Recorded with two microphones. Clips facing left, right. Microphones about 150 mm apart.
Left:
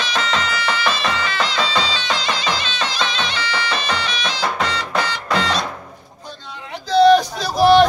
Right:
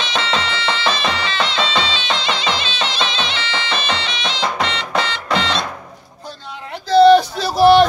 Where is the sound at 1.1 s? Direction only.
30° right (ahead or behind).